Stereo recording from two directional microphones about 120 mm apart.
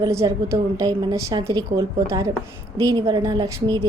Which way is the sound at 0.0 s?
25° right (ahead or behind).